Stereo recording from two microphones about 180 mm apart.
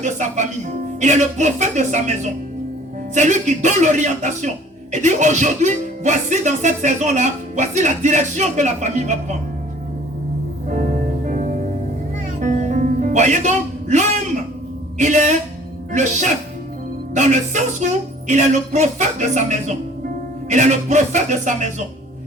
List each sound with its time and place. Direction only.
0.0 s speech: 45° right (ahead or behind)
10.7 s music: 45° right (ahead or behind)
14.9 s speech: 40° right (ahead or behind)
17.2 s speech: 40° right (ahead or behind)